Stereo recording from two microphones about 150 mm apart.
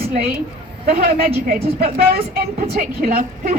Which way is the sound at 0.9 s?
80° right.